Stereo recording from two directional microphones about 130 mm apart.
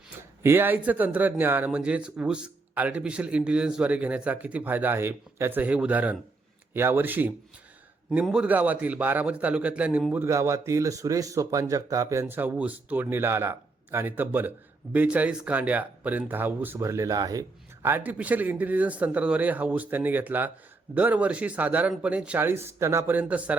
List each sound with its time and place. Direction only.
0.4 s a man's voice: 15° right (ahead or behind)
17.8 s a man's voice: 15° right (ahead or behind)